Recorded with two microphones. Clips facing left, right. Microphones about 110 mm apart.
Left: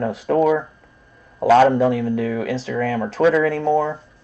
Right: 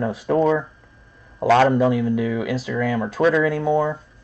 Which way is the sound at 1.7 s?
15° right (ahead or behind).